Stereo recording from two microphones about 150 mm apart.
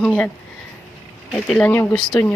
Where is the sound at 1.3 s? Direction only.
5° left (ahead or behind).